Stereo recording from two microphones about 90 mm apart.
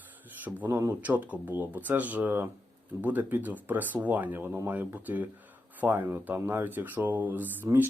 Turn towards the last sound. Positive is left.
turn(degrees=-20)  # may be behind; listen again after turning